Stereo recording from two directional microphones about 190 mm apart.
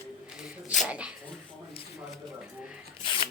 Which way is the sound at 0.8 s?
5° right (ahead or behind).